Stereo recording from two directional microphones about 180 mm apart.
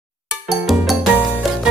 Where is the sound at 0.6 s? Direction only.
5° right (ahead or behind).